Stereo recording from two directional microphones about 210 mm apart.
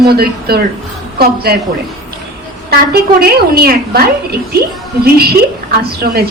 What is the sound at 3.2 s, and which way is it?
A woman's voice, 45° right (ahead or behind).